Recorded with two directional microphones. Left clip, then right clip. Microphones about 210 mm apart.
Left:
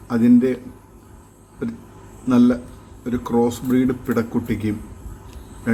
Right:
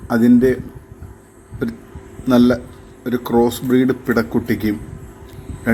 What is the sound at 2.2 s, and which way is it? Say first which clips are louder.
A man's voice: right 3 dB; 5° right (ahead or behind).